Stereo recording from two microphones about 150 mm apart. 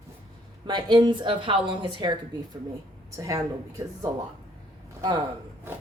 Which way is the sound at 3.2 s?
20° right (ahead or behind).